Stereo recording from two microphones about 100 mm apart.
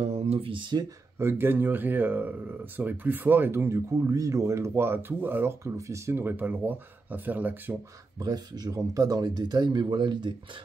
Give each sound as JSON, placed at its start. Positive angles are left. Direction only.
{"t": 0.0, "sound": "speech", "side_deg": -85}
{"t": 1.2, "sound": "speech", "side_deg": -20}
{"t": 8.2, "sound": "speech", "side_deg": -40}